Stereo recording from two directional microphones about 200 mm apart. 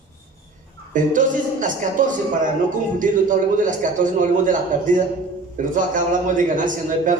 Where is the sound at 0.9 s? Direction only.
40° right (ahead or behind).